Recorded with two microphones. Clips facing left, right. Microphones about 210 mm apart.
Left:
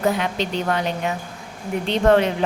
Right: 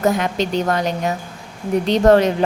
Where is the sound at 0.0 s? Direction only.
45° right (ahead or behind).